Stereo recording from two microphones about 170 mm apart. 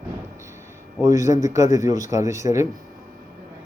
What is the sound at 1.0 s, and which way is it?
A man's voice, 20° right (ahead or behind).